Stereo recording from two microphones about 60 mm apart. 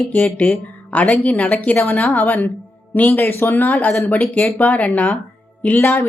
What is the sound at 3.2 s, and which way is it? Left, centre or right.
Speech, left.